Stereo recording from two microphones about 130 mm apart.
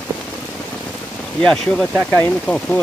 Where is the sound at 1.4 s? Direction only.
5° left (ahead or behind).